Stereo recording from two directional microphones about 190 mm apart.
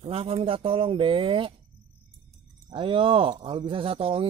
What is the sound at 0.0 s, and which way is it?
Speech, 30° right (ahead or behind).